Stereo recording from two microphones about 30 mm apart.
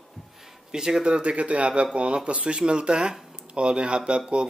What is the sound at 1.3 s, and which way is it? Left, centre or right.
A man's voice, right.